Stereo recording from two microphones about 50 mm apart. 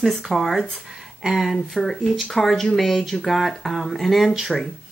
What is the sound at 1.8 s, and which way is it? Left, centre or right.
Speech, centre.